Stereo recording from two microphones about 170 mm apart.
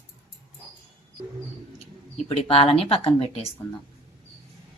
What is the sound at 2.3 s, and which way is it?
Speech, 35° left (ahead or behind).